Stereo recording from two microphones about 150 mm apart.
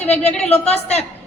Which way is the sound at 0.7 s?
45° left (ahead or behind).